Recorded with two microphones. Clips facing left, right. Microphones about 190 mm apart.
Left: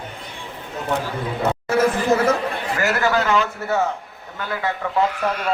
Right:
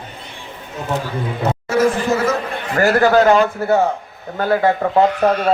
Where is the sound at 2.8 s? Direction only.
40° right (ahead or behind).